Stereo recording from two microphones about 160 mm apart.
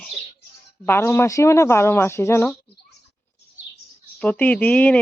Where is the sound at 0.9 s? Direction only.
15° left (ahead or behind).